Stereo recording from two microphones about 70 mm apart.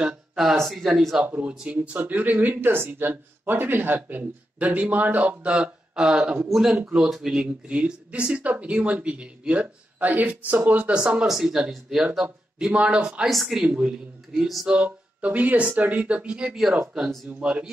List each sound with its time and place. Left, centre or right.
0.0 s a sound: centre
0.6 s speech: centre
1.2 s speech: centre
7.6 s speech: centre
11.0 s speech: centre
13.3 s speech: centre
13.7 s speech: centre